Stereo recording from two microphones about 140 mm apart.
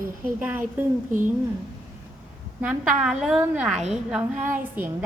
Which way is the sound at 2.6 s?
10° right (ahead or behind).